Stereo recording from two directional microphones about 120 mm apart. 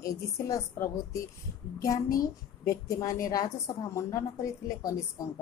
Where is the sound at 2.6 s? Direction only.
25° left (ahead or behind).